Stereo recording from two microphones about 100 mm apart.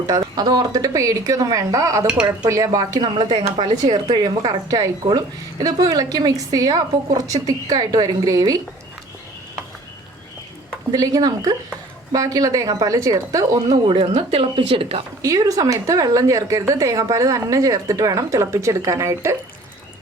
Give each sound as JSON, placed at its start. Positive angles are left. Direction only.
{"t": 0.1, "sound": "a woman's voice", "side_deg": -40}
{"t": 10.9, "sound": "a woman's voice", "side_deg": -40}
{"t": 15.2, "sound": "a woman's voice", "side_deg": -35}